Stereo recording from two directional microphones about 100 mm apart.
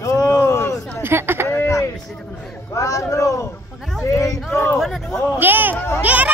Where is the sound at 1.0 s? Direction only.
25° right (ahead or behind).